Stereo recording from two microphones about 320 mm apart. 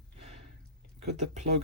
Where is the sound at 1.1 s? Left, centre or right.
Right.